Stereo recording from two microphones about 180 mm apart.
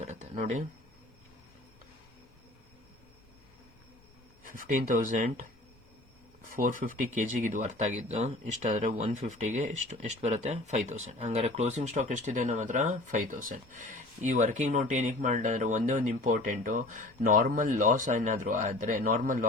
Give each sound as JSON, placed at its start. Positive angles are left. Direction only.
{"t": 0.0, "sound": "a sound", "side_deg": -40}
{"t": 4.5, "sound": "speech", "side_deg": -50}
{"t": 6.5, "sound": "speech", "side_deg": -50}